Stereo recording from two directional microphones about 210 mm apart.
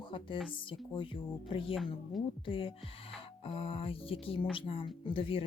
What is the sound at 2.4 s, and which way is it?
Speech, 25° left (ahead or behind).